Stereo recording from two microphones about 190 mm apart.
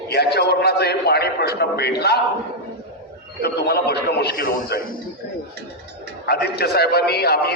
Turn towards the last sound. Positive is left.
turn(degrees=55)  # may be behind; listen again after turning